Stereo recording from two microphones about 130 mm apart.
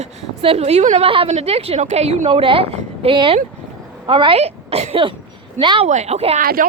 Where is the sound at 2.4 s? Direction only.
45° right (ahead or behind).